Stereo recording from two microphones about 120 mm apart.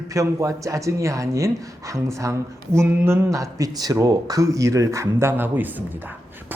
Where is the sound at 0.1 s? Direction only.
30° right (ahead or behind).